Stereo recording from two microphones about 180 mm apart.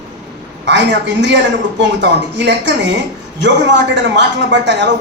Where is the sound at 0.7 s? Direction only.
80° right.